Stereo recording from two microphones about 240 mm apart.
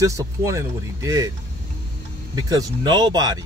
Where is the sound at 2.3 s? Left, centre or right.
Centre.